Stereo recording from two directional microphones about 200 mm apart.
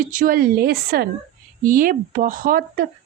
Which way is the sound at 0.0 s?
40° right (ahead or behind).